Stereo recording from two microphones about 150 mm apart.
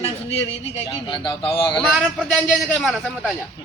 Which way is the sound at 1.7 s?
5° left (ahead or behind).